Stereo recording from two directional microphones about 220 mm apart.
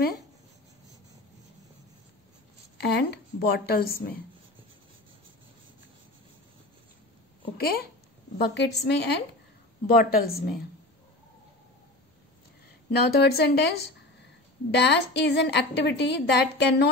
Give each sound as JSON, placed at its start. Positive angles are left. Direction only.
{"t": 2.8, "sound": "a woman's voice", "side_deg": 50}
{"t": 8.4, "sound": "a woman's voice", "side_deg": 50}
{"t": 12.9, "sound": "a woman's voice", "side_deg": 45}